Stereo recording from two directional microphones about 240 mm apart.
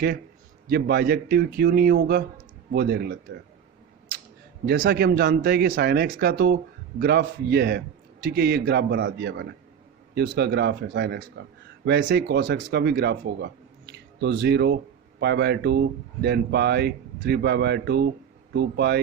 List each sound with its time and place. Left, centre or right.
0.7 s speech: right
4.6 s speech: right